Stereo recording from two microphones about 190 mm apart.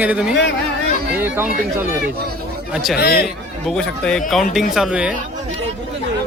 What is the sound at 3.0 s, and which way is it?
Speech, 55° left (ahead or behind).